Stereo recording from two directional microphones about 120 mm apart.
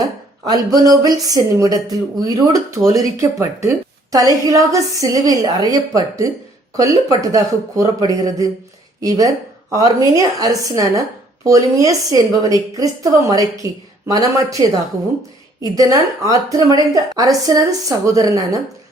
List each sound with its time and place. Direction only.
0.0 s speech: 30° right (ahead or behind)
15.6 s speech: 30° right (ahead or behind)